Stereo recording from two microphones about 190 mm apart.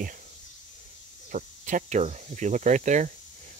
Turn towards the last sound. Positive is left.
turn(degrees=-40)  # may be behind; listen again after turning